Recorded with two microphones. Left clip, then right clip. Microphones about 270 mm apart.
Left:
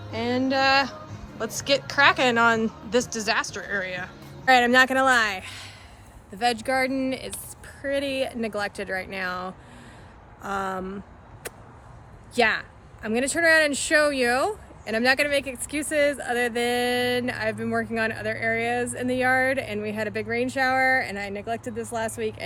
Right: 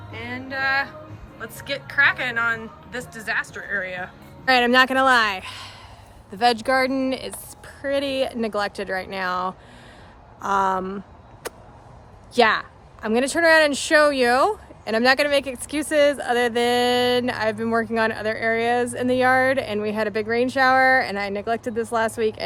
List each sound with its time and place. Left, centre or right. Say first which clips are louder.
0.1 s music: left 6 dB; centre
1.4 s a woman's voice: left 6 dB; centre
12.3 s speech: right 4 dB; centre